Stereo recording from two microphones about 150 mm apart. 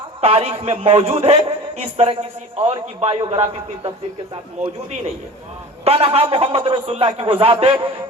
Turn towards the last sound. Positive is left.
turn(degrees=-35)  # may be behind; listen again after turning